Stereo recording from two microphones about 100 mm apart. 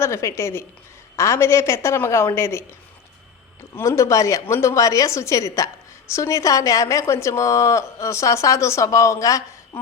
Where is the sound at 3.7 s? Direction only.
30° left (ahead or behind).